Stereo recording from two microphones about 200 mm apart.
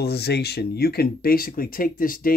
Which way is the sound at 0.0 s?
55° left (ahead or behind).